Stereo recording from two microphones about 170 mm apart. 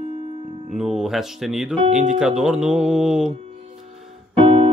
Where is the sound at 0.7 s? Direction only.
Centre (ahead or behind).